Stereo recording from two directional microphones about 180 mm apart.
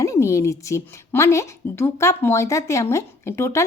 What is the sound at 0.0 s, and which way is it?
Speech, 15° left (ahead or behind).